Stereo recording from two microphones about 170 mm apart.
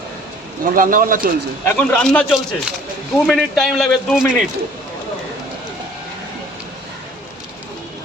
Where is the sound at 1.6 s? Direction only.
10° left (ahead or behind).